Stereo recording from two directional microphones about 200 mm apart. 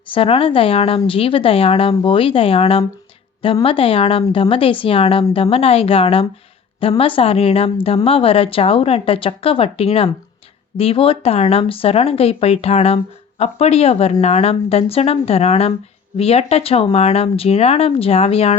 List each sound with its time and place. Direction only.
0.1 s speech: 30° left (ahead or behind)